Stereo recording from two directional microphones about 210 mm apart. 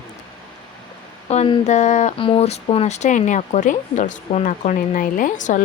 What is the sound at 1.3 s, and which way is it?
Speech, 30° left (ahead or behind).